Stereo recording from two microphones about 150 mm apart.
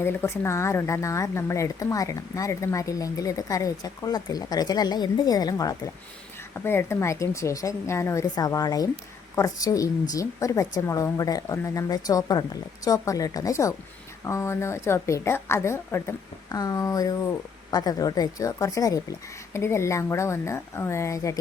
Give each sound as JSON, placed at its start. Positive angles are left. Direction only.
{"t": 0.0, "sound": "a woman's voice", "side_deg": 15}